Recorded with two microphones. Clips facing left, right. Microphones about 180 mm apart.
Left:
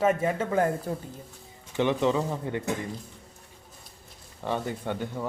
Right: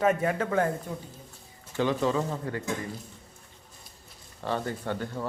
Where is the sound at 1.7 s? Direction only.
20° left (ahead or behind).